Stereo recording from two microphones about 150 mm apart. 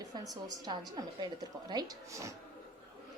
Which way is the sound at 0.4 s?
25° right (ahead or behind).